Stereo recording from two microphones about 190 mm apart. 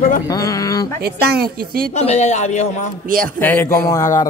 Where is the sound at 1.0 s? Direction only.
55° right (ahead or behind).